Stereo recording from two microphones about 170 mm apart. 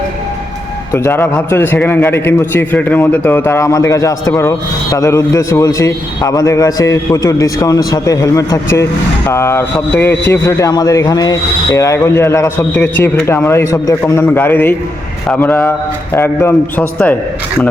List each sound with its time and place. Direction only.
0.9 s a man's voice: 15° left (ahead or behind)